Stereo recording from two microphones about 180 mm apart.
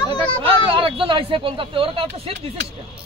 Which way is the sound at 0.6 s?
30° right (ahead or behind).